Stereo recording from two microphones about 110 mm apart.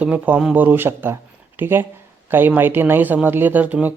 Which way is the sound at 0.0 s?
15° right (ahead or behind).